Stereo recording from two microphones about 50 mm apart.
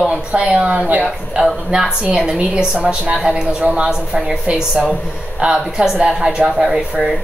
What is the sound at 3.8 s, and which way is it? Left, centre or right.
Speech, centre.